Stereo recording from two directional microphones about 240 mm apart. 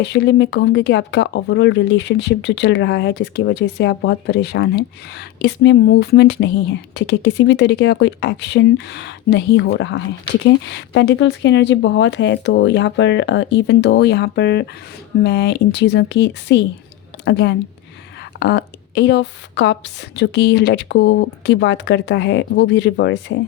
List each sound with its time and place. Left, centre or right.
0.0 s speech: left